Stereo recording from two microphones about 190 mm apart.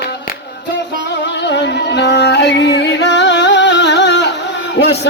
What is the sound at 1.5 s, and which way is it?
Music, 65° left (ahead or behind).